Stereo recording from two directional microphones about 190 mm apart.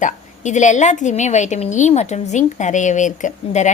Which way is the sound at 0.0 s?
40° left (ahead or behind).